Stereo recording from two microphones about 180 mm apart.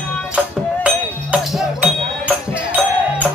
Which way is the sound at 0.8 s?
5° right (ahead or behind).